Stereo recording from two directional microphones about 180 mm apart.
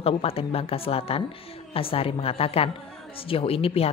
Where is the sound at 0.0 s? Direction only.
30° left (ahead or behind).